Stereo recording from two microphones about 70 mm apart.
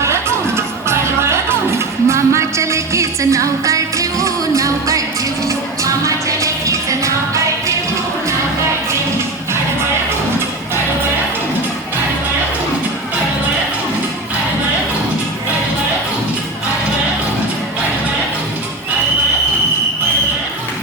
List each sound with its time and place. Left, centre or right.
0.0 s music: right